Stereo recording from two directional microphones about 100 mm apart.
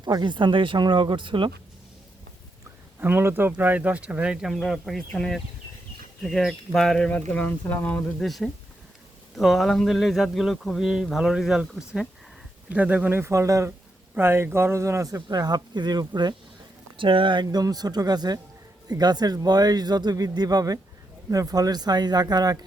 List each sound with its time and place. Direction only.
0.0 s speech: 50° right (ahead or behind)
3.0 s speech: 20° right (ahead or behind); by 8.3 s 10° left (ahead or behind)
9.3 s speech: centre (ahead or behind)
12.6 s a man's voice: 15° right (ahead or behind); by 16.3 s 45° right (ahead or behind)
17.0 s speech: 60° right (ahead or behind); by 22.6 s 45° right (ahead or behind)